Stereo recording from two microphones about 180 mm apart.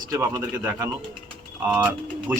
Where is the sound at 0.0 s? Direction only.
20° right (ahead or behind).